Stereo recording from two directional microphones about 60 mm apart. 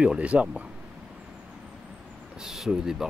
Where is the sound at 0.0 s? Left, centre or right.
Centre.